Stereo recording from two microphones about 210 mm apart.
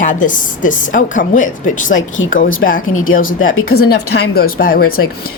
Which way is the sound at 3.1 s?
40° left (ahead or behind).